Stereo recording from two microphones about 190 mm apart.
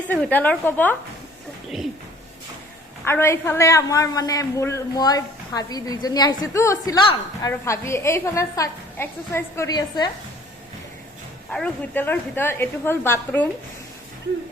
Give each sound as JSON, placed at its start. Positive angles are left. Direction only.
{"t": 0.1, "sound": "a woman's voice", "side_deg": 10}
{"t": 3.0, "sound": "a woman's voice", "side_deg": 15}
{"t": 11.5, "sound": "a woman's voice", "side_deg": 10}